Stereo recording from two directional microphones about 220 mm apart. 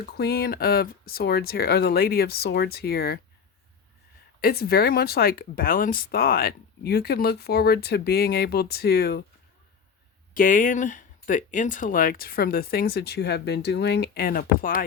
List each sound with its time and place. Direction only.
0.0 s speech: 45° left (ahead or behind)
4.4 s speech: 45° left (ahead or behind)
10.3 s speech: 40° left (ahead or behind)